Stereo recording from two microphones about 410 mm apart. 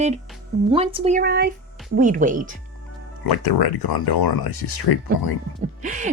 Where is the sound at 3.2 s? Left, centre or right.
Left.